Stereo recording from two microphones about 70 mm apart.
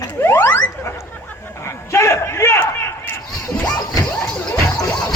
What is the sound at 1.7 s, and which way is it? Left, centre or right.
Battle cry, left.